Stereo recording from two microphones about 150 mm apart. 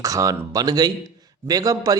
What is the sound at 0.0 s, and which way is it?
A man's voice, 20° right (ahead or behind).